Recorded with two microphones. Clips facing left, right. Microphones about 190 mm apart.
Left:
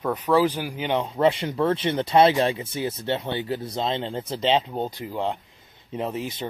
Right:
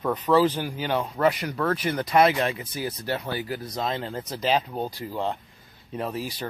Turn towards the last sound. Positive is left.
turn(degrees=20)  # may be behind; listen again after turning